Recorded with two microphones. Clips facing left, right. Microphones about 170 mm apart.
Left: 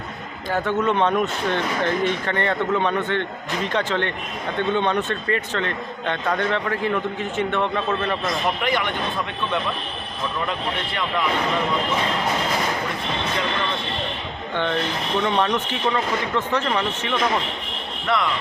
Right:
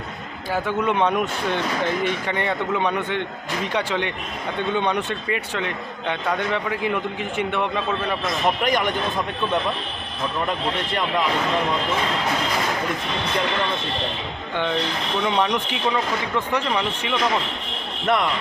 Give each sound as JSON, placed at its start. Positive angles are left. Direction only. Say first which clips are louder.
{"t": 0.5, "sound": "a man's voice", "louder": "left 1 dB", "side_deg": -10}
{"t": 8.6, "sound": "a man's voice", "louder": "right 2 dB", "side_deg": -45}
{"t": 14.5, "sound": "a man's voice", "louder": "even", "side_deg": -10}